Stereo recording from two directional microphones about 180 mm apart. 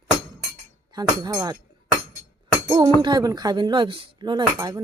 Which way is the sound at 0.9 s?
20° right (ahead or behind).